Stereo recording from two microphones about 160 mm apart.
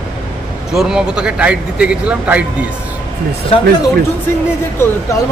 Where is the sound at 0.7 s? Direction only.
5° right (ahead or behind).